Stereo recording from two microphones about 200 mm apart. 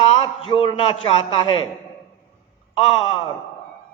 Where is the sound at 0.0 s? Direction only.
25° left (ahead or behind).